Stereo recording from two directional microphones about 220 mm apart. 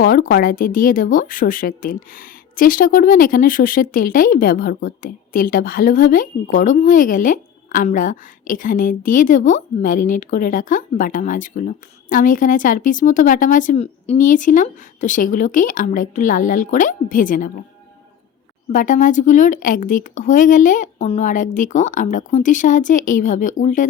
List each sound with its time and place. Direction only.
0.0 s speech: 40° left (ahead or behind)
18.7 s speech: 40° left (ahead or behind)